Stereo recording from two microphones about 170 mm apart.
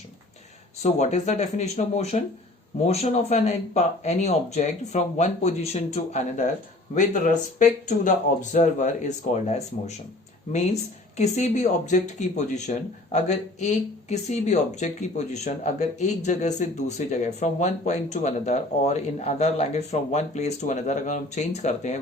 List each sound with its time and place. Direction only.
0.8 s speech: 40° left (ahead or behind)
11.2 s speech: 40° left (ahead or behind)